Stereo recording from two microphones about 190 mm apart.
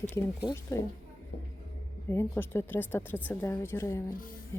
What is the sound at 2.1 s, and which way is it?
A woman's voice, 15° left (ahead or behind).